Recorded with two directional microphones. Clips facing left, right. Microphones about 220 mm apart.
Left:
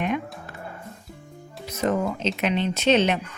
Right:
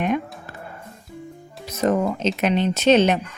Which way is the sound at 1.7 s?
40° right (ahead or behind).